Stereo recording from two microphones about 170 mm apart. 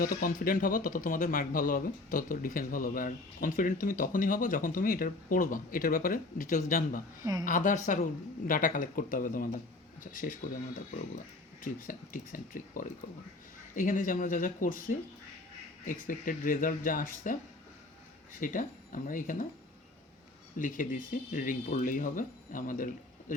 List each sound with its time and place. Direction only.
0.0 s speech: 55° left (ahead or behind)
11.6 s speech: 55° left (ahead or behind)
18.3 s speech: 50° left (ahead or behind)
20.6 s speech: 50° left (ahead or behind)